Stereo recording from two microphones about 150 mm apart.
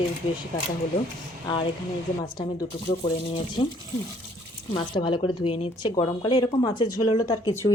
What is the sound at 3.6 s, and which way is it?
Speech, 35° left (ahead or behind).